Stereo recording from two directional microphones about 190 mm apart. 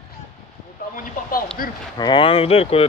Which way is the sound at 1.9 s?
25° left (ahead or behind).